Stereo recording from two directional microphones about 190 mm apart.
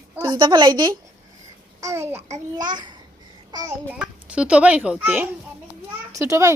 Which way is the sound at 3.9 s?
5° right (ahead or behind).